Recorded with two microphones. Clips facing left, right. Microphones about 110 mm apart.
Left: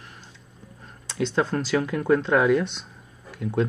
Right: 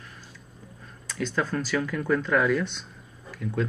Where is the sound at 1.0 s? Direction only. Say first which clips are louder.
Left 4 dB; 25° left (ahead or behind).